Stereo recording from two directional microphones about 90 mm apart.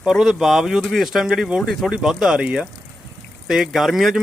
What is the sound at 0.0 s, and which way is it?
Speech, 5° right (ahead or behind).